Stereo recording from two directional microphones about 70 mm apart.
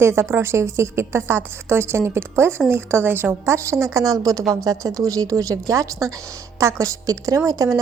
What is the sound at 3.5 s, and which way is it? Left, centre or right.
A woman's voice, right.